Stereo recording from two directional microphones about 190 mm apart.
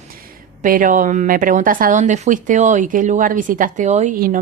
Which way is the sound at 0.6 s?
45° right (ahead or behind).